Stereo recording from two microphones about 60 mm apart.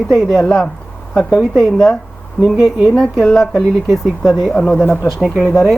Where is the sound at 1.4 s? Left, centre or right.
Centre.